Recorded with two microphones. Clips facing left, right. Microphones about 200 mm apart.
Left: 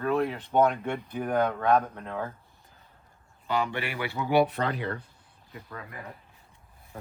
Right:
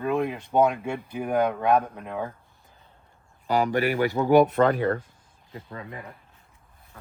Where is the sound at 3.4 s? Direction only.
40° right (ahead or behind).